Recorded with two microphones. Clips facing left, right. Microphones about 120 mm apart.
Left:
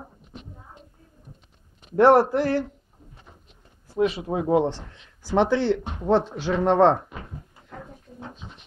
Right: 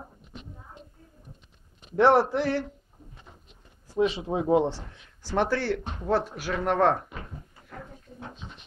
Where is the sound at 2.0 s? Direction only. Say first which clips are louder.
Left 4 dB; 10° left (ahead or behind).